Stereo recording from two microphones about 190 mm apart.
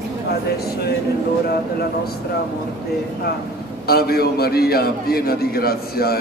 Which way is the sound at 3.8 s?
55° left (ahead or behind).